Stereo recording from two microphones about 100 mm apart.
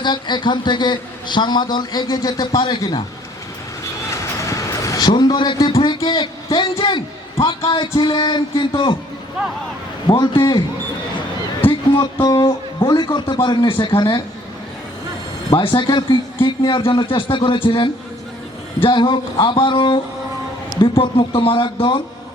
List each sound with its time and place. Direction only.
0.0 s a man's voice: 50° left (ahead or behind)
4.1 s a sound: 30° left (ahead or behind); by 5.5 s 45° left (ahead or behind)
6.1 s a man's voice: 60° left (ahead or behind)
9.4 s speech: 10° right (ahead or behind)
10.1 s a man's voice: 45° left (ahead or behind)
12.2 s a man's voice: 50° left (ahead or behind)
15.4 s a man's voice: 55° left (ahead or behind)